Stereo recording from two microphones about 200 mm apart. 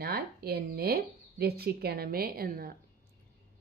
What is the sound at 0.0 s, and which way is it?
Speech, 50° right (ahead or behind).